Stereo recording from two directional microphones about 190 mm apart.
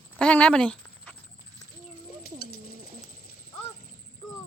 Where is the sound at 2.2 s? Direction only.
50° left (ahead or behind).